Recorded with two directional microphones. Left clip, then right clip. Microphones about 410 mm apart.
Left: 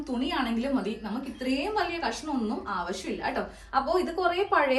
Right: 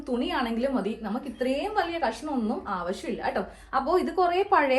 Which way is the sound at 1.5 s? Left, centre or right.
Centre.